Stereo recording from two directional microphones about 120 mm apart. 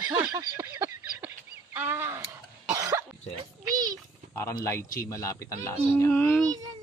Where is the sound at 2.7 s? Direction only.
30° right (ahead or behind).